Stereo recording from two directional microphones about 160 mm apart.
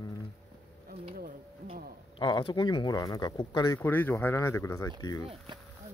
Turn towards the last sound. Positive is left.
turn(degrees=-30)  # may be behind; listen again after turning